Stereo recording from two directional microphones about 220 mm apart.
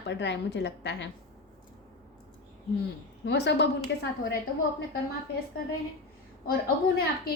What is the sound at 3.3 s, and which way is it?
Speech, 50° left (ahead or behind).